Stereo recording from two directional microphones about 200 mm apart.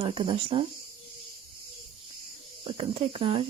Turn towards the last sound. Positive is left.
turn(degrees=-25)  # may be behind; listen again after turning